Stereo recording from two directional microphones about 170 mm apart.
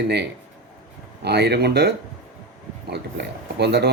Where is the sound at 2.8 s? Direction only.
85° right.